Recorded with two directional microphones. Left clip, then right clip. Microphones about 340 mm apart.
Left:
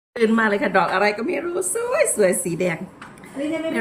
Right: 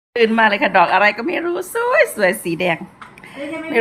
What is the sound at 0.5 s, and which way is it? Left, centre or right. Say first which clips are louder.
Speech: right 5 dB; right.